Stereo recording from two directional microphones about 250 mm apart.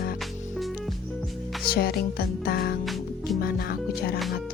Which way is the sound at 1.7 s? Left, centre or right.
Left.